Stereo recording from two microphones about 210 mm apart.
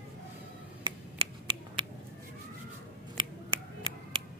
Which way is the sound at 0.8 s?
25° right (ahead or behind).